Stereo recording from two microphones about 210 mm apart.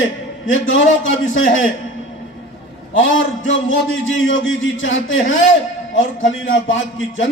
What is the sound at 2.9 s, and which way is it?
A man's voice, 65° left (ahead or behind).